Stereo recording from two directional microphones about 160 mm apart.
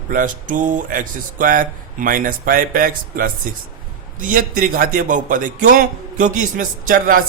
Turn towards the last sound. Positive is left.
turn(degrees=-55)  # may be behind; listen again after turning